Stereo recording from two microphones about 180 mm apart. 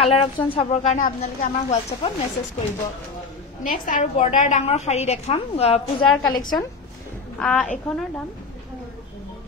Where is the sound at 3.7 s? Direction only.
45° left (ahead or behind).